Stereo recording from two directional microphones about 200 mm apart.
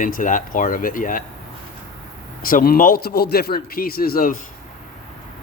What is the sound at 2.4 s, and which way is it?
A man's voice, 45° left (ahead or behind).